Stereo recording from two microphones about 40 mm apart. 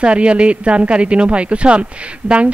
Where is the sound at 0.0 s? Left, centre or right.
Right.